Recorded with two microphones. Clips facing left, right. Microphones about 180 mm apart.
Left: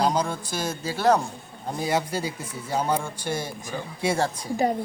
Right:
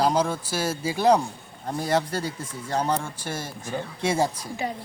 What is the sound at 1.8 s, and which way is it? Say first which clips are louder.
A man's voice: right 1 dB; centre (ahead or behind).